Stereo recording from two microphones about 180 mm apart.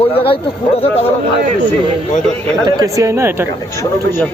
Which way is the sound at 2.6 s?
20° right (ahead or behind).